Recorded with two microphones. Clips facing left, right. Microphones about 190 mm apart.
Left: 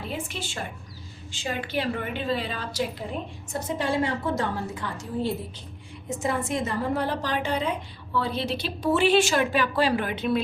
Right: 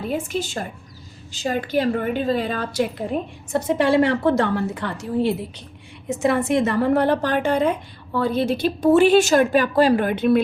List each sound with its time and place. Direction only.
0.1 s a woman's voice: 45° right (ahead or behind)
3.5 s a woman's voice: 70° right (ahead or behind)